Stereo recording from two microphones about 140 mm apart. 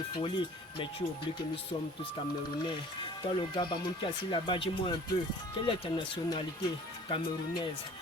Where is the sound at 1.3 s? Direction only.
45° left (ahead or behind).